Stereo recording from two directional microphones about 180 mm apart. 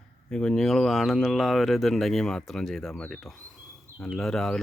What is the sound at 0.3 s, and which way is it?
Speech, 5° left (ahead or behind).